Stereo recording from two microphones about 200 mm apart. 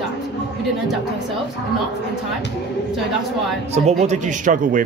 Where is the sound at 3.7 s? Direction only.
35° right (ahead or behind).